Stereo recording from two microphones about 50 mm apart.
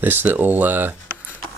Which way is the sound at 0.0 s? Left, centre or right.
Right.